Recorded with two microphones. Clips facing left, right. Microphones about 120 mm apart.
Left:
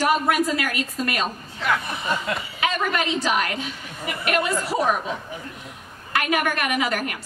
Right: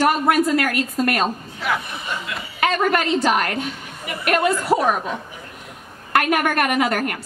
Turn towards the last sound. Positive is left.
turn(degrees=-50)  # may be behind; listen again after turning